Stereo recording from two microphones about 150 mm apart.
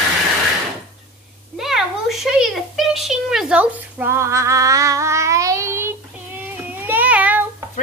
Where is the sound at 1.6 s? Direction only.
Centre (ahead or behind).